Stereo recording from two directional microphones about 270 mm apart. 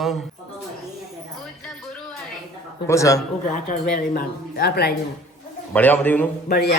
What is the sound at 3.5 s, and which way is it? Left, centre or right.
A woman's voice, left.